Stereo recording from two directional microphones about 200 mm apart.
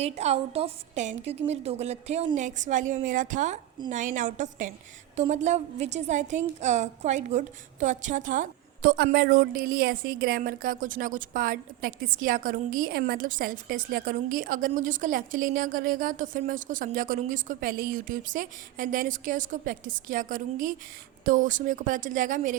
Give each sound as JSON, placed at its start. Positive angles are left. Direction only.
{"t": 0.0, "sound": "a woman's voice", "side_deg": -30}